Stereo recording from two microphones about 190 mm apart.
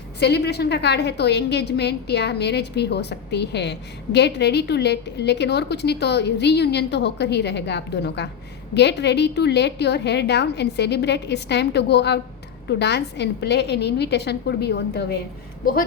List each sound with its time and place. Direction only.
0.2 s a woman's voice: 60° left (ahead or behind)